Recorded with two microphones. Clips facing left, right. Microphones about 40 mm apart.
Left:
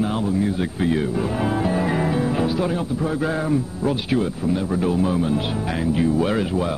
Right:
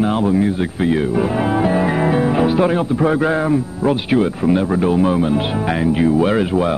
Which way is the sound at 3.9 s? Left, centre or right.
Right.